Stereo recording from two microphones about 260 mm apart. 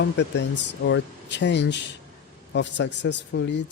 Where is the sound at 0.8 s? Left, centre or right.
Left.